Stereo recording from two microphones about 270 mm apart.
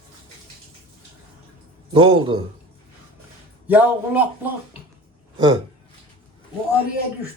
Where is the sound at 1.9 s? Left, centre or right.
Centre.